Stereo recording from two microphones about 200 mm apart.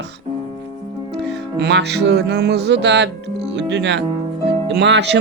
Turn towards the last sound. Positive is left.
turn(degrees=-60)  # may be behind; listen again after turning